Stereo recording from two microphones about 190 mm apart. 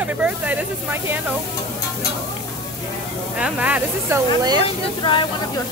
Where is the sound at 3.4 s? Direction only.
5° right (ahead or behind).